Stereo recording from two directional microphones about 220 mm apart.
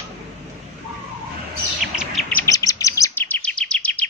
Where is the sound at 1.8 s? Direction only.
5° right (ahead or behind).